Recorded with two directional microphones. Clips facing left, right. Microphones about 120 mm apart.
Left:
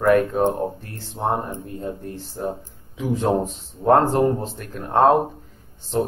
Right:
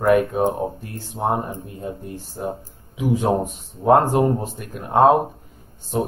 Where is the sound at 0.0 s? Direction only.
10° right (ahead or behind).